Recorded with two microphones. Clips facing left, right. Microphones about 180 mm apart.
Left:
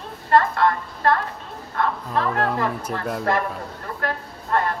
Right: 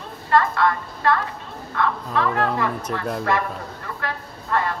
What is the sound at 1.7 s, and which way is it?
Speech, 40° left (ahead or behind).